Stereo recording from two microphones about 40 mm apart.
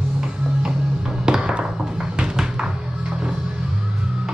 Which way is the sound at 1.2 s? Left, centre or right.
Right.